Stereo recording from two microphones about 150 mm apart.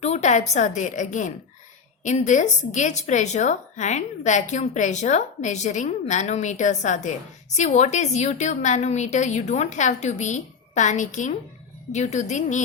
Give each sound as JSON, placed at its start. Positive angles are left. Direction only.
{"t": 0.0, "sound": "a woman's voice", "side_deg": 50}